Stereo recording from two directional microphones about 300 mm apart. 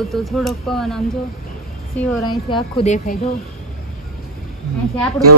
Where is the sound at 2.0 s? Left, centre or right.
Centre.